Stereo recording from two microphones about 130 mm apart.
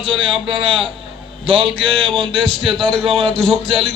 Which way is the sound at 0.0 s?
45° right (ahead or behind).